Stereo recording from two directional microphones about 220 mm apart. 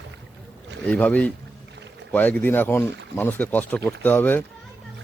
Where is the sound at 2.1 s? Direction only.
10° left (ahead or behind).